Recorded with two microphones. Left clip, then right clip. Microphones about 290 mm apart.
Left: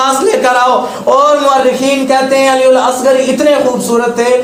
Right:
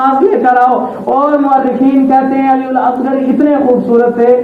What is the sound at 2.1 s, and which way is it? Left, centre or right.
Speech, left.